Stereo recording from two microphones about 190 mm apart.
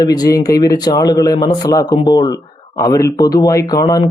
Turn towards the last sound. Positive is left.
turn(degrees=20)  # may be behind; listen again after turning